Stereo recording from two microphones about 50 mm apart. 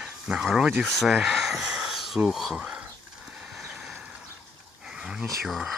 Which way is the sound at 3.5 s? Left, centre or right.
Centre.